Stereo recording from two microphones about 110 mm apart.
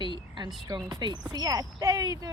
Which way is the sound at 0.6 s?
35° right (ahead or behind).